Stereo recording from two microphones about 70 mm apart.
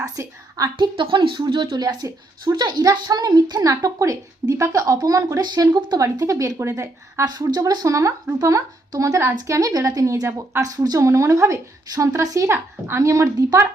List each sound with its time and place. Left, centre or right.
0.0 s a woman's voice: right
1.5 s a woman's voice: right
5.4 s speech: right
6.0 s a woman's voice: right
7.3 s speech: right
7.9 s a woman's voice: right
12.5 s a woman's voice: right